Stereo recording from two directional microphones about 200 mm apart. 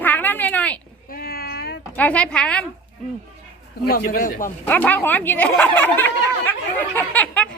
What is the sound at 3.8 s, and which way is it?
Speech, 45° left (ahead or behind).